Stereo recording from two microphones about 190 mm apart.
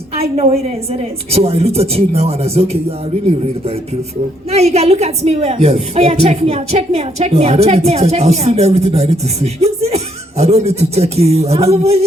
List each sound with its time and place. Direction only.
0.2 s a woman's voice: 30° right (ahead or behind)
4.5 s a woman's voice: 35° right (ahead or behind)